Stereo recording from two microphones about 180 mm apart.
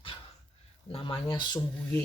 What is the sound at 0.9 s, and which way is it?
Speech, 30° left (ahead or behind).